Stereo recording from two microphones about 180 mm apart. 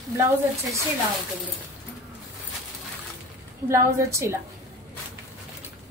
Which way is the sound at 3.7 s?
15° right (ahead or behind).